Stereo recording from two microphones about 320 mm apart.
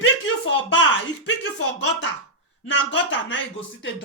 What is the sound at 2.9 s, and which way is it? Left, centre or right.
Speech, left.